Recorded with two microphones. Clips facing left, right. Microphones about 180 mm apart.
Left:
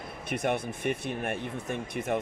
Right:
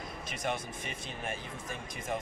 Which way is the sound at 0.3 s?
60° left (ahead or behind).